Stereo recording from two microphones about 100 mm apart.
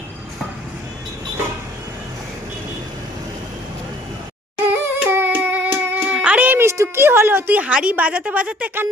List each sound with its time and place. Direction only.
4.6 s hands: 20° right (ahead or behind)
6.1 s a woman's voice: 15° right (ahead or behind)